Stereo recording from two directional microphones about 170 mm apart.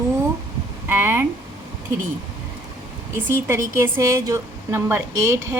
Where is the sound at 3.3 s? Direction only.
15° right (ahead or behind).